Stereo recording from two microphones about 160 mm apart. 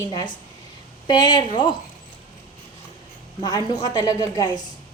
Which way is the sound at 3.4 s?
25° left (ahead or behind).